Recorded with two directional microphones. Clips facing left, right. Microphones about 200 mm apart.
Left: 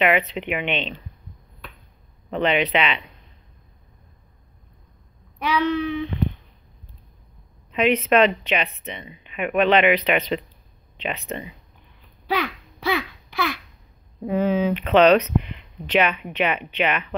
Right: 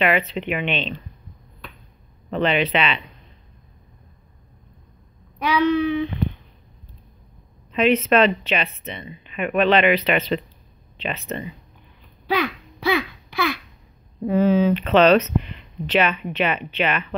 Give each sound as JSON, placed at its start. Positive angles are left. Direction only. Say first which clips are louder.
{"t": 0.0, "sound": "speech", "louder": "even", "side_deg": 15}
{"t": 2.3, "sound": "speech", "louder": "even", "side_deg": 15}
{"t": 5.4, "sound": "a sound", "louder": "right 3 dB", "side_deg": -10}
{"t": 7.7, "sound": "speech", "louder": "right 1 dB", "side_deg": 15}
{"t": 12.4, "sound": "a child's voice", "louder": "right 3 dB", "side_deg": -10}
{"t": 14.2, "sound": "speech", "louder": "right 3 dB", "side_deg": 15}